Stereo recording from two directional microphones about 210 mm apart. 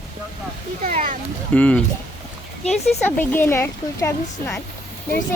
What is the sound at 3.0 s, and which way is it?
Speech, 10° left (ahead or behind).